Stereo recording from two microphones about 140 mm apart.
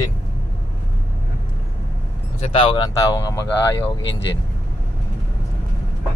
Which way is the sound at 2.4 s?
40° left (ahead or behind).